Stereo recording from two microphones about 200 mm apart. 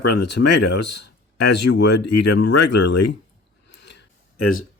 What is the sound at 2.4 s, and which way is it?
Speech, 55° left (ahead or behind).